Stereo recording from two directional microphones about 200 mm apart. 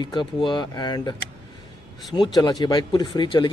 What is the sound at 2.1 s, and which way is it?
Speech, 20° left (ahead or behind).